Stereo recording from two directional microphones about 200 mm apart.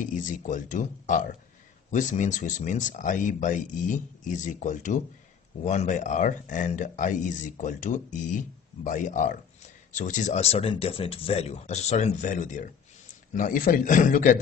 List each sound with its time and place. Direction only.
0.0 s speech: 40° left (ahead or behind)